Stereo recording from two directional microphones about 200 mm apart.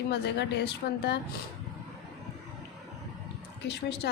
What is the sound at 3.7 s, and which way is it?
Speech, 55° left (ahead or behind).